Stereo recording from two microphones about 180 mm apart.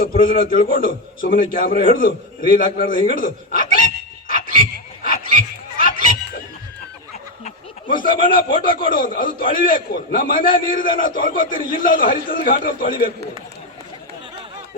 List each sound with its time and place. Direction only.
0.0 s a man's voice: 50° left (ahead or behind)
5.7 s a sound: 50° left (ahead or behind)
7.4 s a man's voice: 50° left (ahead or behind)